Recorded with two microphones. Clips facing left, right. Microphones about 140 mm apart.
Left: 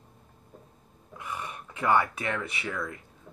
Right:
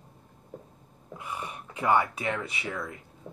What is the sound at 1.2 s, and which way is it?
Speech, 25° right (ahead or behind).